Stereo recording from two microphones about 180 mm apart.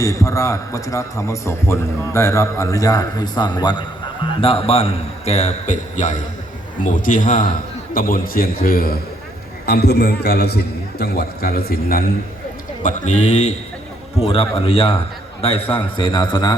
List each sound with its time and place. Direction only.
0.0 s a man's voice: 15° left (ahead or behind); by 12.0 s 55° left (ahead or behind)
12.8 s a man's voice: 40° left (ahead or behind); by 16.6 s 25° left (ahead or behind)